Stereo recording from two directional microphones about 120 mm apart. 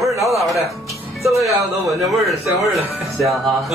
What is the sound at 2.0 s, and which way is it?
Speech, centre (ahead or behind).